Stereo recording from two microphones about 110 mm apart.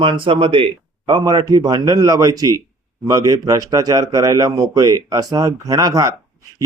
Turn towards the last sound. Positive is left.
turn(degrees=-30)  # may be behind; listen again after turning